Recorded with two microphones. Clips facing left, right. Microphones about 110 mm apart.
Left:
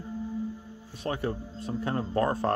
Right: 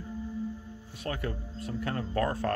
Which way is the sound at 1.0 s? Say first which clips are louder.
Left 4 dB; 25° left (ahead or behind).